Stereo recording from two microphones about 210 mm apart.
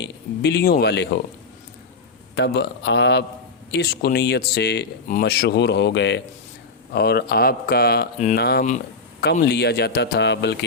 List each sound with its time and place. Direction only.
0.0 s speech: 55° left (ahead or behind)
2.3 s speech: 55° left (ahead or behind)